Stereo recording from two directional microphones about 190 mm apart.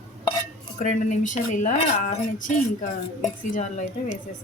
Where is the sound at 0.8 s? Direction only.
40° left (ahead or behind).